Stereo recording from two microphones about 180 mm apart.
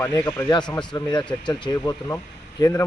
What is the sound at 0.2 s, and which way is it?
A man's voice, 15° left (ahead or behind).